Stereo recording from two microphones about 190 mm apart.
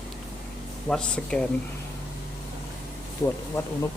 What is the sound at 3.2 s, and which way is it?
Speech, 15° left (ahead or behind).